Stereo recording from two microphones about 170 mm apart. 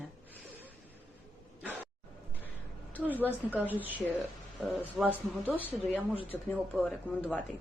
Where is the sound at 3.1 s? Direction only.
10° right (ahead or behind).